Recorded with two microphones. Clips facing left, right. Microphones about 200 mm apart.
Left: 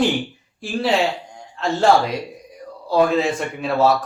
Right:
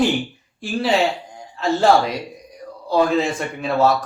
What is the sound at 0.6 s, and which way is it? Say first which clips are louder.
Speech: right 1 dB; centre (ahead or behind).